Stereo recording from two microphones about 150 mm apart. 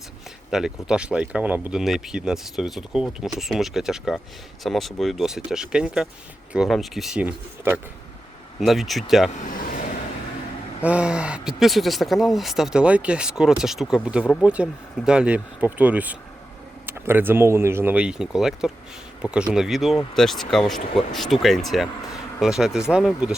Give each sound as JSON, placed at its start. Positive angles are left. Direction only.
{"t": 0.5, "sound": "speech", "side_deg": -5}
{"t": 8.6, "sound": "speech", "side_deg": 0}
{"t": 9.4, "sound": "a sound", "side_deg": 65}
{"t": 10.8, "sound": "speech", "side_deg": -10}